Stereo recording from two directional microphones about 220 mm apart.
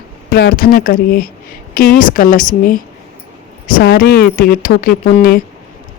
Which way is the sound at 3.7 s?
40° left (ahead or behind).